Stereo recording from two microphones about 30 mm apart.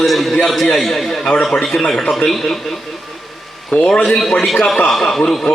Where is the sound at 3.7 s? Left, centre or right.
Left.